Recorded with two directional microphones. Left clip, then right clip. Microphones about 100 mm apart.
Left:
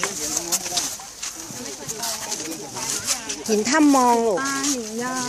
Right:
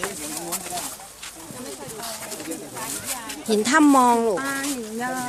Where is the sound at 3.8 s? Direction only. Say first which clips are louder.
Left 1 dB; 20° right (ahead or behind).